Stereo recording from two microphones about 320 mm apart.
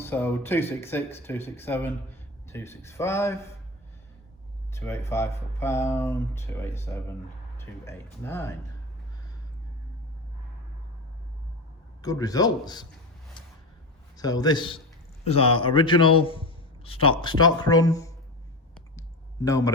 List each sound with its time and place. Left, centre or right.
0.0 s a man's voice: centre
4.7 s a man's voice: centre
12.0 s a man's voice: centre
13.4 s a sound: centre
14.2 s a man's voice: centre
18.9 s a sound: centre